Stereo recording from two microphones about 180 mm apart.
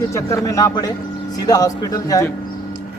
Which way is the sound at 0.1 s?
20° left (ahead or behind).